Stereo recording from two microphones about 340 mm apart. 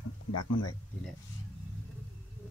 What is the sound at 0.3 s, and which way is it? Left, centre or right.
Speech, left.